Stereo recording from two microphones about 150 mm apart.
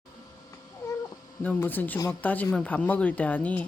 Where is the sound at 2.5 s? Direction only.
10° left (ahead or behind).